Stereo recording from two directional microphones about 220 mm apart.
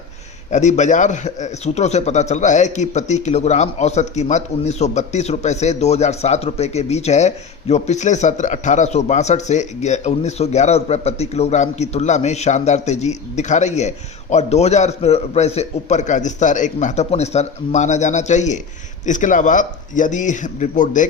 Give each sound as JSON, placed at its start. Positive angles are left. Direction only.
{"t": 0.5, "sound": "a man's voice", "side_deg": 30}